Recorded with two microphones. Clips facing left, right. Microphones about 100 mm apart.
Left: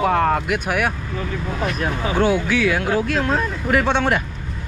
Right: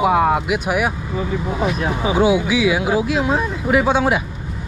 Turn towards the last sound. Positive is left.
turn(degrees=-5)  # may be behind; listen again after turning